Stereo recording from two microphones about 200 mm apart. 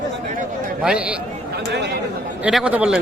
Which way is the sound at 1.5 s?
55° right (ahead or behind).